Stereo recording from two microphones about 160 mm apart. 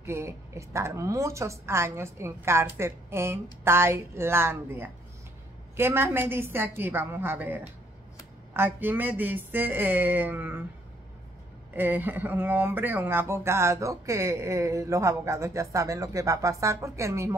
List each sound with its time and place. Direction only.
0.0 s a woman's voice: 15° right (ahead or behind)
11.7 s speech: 10° right (ahead or behind)